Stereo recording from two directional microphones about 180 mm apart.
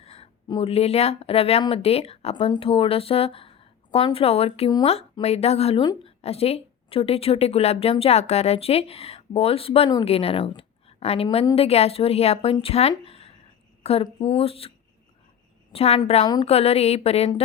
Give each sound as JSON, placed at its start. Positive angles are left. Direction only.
{"t": 0.0, "sound": "speech", "side_deg": 35}
{"t": 12.9, "sound": "a sound", "side_deg": 30}
{"t": 13.8, "sound": "speech", "side_deg": 35}
{"t": 15.7, "sound": "a woman's voice", "side_deg": 35}
{"t": 16.2, "sound": "a woman's voice", "side_deg": 25}
{"t": 16.5, "sound": "speech", "side_deg": 35}